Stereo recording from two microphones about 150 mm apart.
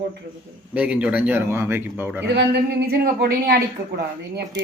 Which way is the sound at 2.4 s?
90° right.